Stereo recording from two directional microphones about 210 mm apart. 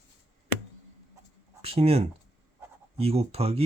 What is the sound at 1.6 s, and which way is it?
Speech, 30° right (ahead or behind).